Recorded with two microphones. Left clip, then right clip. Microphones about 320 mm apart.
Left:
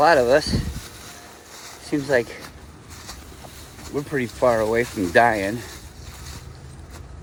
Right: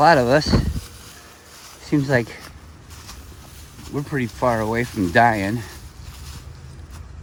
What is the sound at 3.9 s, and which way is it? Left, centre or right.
Speech, centre.